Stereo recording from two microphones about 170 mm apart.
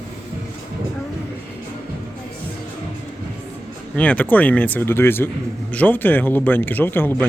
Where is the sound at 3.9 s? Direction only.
10° left (ahead or behind).